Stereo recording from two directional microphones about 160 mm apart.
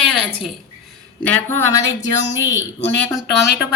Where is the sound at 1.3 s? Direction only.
15° left (ahead or behind).